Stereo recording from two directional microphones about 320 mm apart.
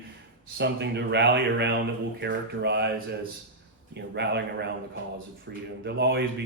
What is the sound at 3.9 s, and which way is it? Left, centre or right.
Speech, right.